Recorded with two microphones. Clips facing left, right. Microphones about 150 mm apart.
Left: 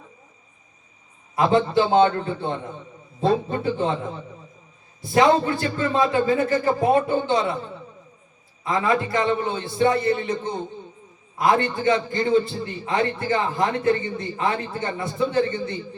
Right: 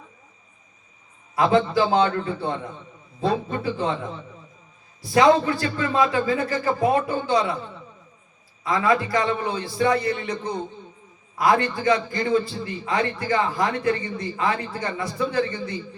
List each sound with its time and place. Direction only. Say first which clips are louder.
1.4 s a man's voice: even; 25° left (ahead or behind)
5.0 s a man's voice: right 1 dB; 25° left (ahead or behind)
8.6 s a man's voice: right 1 dB; 25° left (ahead or behind)